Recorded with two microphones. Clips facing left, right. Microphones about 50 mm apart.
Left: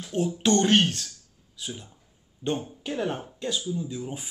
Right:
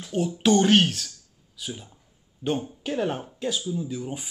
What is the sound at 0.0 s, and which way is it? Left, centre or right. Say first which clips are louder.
Speech: right 2 dB; centre.